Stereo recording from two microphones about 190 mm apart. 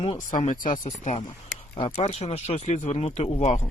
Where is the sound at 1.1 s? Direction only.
30° left (ahead or behind).